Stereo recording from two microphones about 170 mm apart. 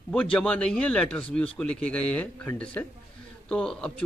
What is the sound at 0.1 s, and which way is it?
A man's voice, 5° left (ahead or behind).